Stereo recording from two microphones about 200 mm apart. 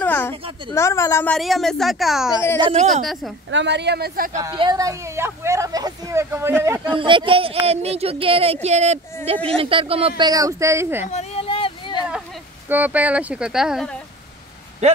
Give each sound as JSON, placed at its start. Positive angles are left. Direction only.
{"t": 0.0, "sound": "a woman's voice", "side_deg": 10}
{"t": 2.6, "sound": "speech", "side_deg": -30}
{"t": 3.4, "sound": "speech", "side_deg": -60}
{"t": 4.4, "sound": "speech", "side_deg": -20}
{"t": 6.9, "sound": "speech", "side_deg": -25}
{"t": 11.1, "sound": "a sound", "side_deg": 30}
{"t": 12.6, "sound": "speech", "side_deg": -10}